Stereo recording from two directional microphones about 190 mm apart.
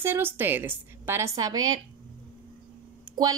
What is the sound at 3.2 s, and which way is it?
Speech, 20° right (ahead or behind).